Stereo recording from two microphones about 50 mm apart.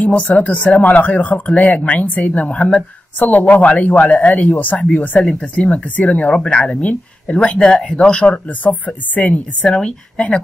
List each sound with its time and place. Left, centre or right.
0.0 s speech: left
3.2 s speech: left
9.7 s speech: centre